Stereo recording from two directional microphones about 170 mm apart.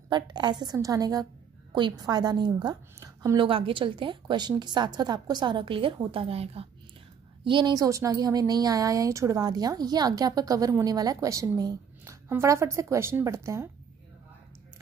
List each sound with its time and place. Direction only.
0.1 s a woman's voice: 25° right (ahead or behind)